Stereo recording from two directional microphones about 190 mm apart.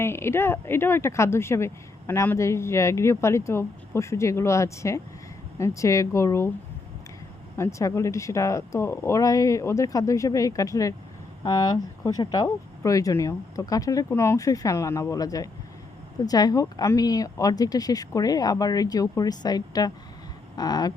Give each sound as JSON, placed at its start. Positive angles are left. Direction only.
{"t": 0.0, "sound": "speech", "side_deg": 15}
{"t": 7.5, "sound": "speech", "side_deg": 15}